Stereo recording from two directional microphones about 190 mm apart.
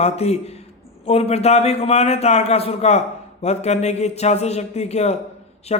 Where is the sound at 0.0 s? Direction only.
35° left (ahead or behind).